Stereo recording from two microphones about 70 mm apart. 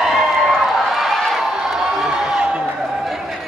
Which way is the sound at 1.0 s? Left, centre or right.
Centre.